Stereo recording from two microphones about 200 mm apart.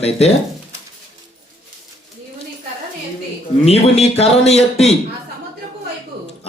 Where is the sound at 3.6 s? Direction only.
30° left (ahead or behind).